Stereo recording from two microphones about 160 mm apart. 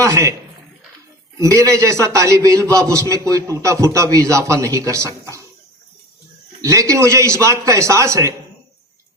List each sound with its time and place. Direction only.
0.0 s a man's voice: 20° right (ahead or behind)
1.4 s a man's voice: 20° right (ahead or behind)
6.6 s a man's voice: 20° right (ahead or behind)